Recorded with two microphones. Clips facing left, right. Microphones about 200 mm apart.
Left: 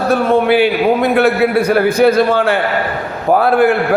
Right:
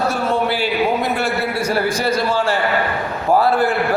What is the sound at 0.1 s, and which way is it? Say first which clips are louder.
A man's voice: left 8 dB; 60° left (ahead or behind).